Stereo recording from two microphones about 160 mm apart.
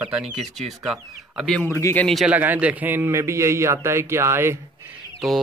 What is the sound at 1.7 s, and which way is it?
Speech, 15° left (ahead or behind).